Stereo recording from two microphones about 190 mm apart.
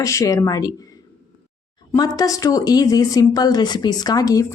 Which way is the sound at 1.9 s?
20° left (ahead or behind).